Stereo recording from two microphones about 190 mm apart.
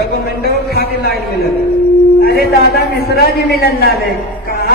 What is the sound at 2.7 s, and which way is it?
A man's voice, 60° left (ahead or behind).